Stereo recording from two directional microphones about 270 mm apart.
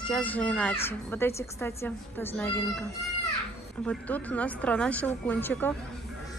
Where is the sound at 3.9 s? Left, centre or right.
Centre.